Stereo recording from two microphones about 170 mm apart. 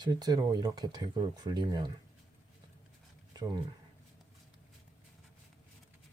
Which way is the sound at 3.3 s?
25° right (ahead or behind).